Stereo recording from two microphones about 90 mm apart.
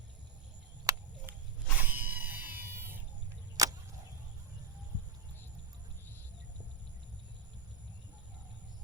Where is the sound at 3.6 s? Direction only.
40° right (ahead or behind).